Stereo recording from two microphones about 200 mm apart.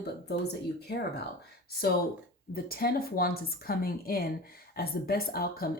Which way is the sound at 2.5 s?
50° left (ahead or behind).